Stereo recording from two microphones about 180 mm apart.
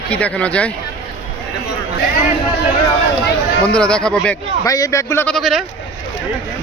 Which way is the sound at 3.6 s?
5° left (ahead or behind).